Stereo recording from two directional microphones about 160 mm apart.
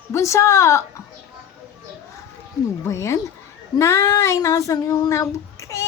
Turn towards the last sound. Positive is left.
turn(degrees=20)  # may be behind; listen again after turning